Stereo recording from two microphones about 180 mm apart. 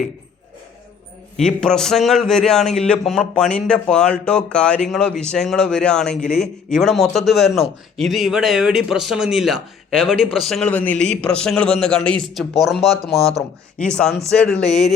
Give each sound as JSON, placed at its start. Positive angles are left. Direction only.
{"t": 1.4, "sound": "a man's voice", "side_deg": 5}
{"t": 13.7, "sound": "a man's voice", "side_deg": 5}